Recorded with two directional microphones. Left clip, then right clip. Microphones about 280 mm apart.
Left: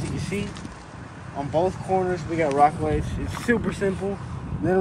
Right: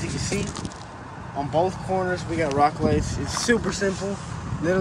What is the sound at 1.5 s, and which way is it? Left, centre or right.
Speech, centre.